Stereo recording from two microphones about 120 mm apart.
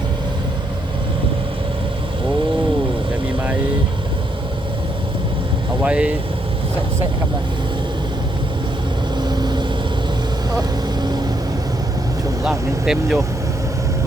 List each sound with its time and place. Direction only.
5.8 s speech: 10° right (ahead or behind)
9.2 s vehicle: 35° right (ahead or behind)
12.5 s speech: 5° right (ahead or behind)